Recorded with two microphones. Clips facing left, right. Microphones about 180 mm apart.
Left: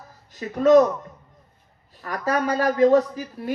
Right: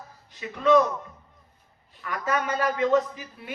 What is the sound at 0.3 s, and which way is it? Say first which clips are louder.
Speech: left 5 dB; 45° left (ahead or behind).